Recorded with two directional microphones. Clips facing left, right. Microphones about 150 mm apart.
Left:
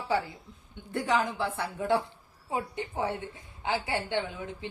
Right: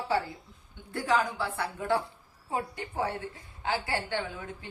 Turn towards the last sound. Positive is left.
turn(degrees=20)  # may be behind; listen again after turning